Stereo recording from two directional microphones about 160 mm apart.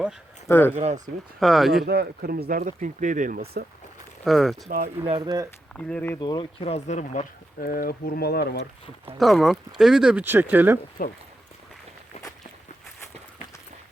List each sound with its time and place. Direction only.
0.4 s speech: 15° left (ahead or behind)
0.8 s speech: 45° right (ahead or behind)
1.4 s speech: centre (ahead or behind)
1.9 s speech: 75° right (ahead or behind); by 3.4 s 55° right (ahead or behind)
4.2 s speech: centre (ahead or behind)
4.7 s speech: 50° right (ahead or behind)
5.1 s speech: 25° right (ahead or behind)
5.7 s speech: 10° left (ahead or behind)
6.1 s speech: 30° left (ahead or behind); by 7.3 s 45° left (ahead or behind)
7.6 s speech: 70° left (ahead or behind); by 8.6 s 85° left
9.1 s speech: centre (ahead or behind)
11.0 s speech: 65° left (ahead or behind)